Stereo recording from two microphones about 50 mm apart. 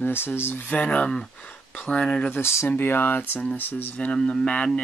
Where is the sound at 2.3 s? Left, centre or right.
Left.